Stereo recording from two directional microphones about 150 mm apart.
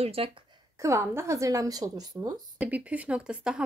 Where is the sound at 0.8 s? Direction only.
20° right (ahead or behind).